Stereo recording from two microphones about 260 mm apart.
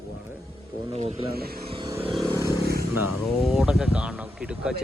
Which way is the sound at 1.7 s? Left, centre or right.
Centre.